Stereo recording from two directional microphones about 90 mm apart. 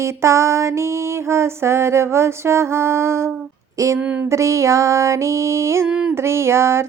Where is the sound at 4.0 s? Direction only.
15° right (ahead or behind).